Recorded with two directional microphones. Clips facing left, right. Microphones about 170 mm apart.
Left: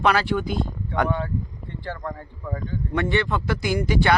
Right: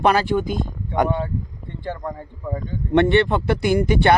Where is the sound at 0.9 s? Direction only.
20° right (ahead or behind).